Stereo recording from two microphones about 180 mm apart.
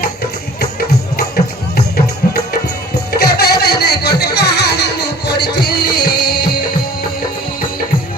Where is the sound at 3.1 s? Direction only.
60° left (ahead or behind).